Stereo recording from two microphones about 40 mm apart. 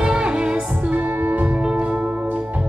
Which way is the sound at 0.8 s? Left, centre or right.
Right.